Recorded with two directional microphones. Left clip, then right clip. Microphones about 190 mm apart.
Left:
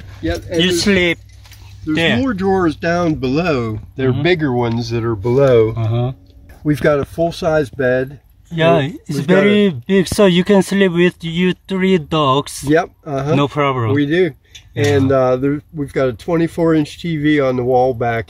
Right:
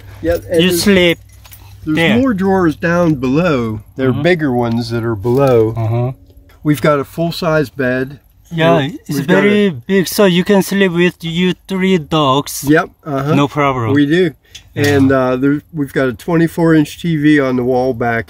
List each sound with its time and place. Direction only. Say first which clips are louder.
0.6 s speech: right 2 dB; 10° right (ahead or behind)
2.2 s speech: right 2 dB; 35° right (ahead or behind); by 5.2 s 15° right (ahead or behind)
5.2 s speech: even; centre (ahead or behind)
6.6 s speech: right 2 dB; 30° right (ahead or behind)
8.5 s speech: right 1 dB; centre (ahead or behind)
12.6 s speech: right 3 dB; 35° right (ahead or behind)
13.4 s speech: right 3 dB; centre (ahead or behind)
13.9 s speech: right 3 dB; 35° right (ahead or behind)